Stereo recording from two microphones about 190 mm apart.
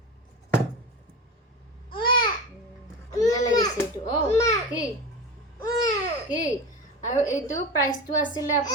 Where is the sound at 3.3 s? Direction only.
20° left (ahead or behind).